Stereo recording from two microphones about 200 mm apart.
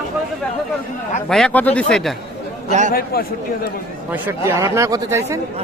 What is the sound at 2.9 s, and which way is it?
Speech, 50° left (ahead or behind).